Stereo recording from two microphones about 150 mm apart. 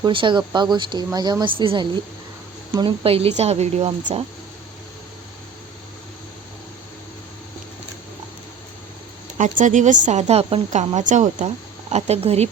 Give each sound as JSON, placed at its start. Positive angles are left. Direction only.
{"t": 0.0, "sound": "a woman's voice", "side_deg": -35}
{"t": 9.4, "sound": "a woman's voice", "side_deg": -55}
{"t": 11.9, "sound": "a woman's voice", "side_deg": -45}